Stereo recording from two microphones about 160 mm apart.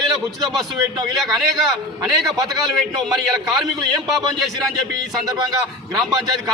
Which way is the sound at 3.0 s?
Centre (ahead or behind).